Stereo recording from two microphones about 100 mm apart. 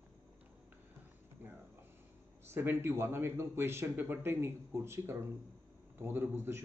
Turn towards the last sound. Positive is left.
turn(degrees=-25)  # may be behind; listen again after turning